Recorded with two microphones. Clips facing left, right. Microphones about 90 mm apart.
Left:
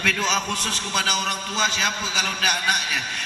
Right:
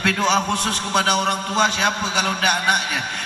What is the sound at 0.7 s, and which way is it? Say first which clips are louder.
A man's voice: right 6 dB; 55° right (ahead or behind).